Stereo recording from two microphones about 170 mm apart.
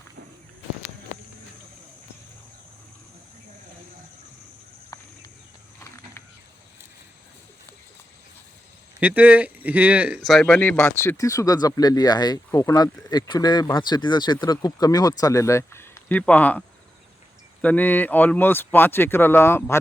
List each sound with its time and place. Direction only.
4.9 s a sound: 20° left (ahead or behind)
9.0 s speech: 10° right (ahead or behind)
10.2 s speech: 5° left (ahead or behind)